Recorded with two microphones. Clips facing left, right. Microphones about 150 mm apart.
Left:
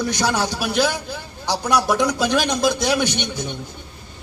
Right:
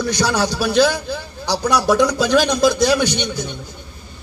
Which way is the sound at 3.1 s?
55° left (ahead or behind).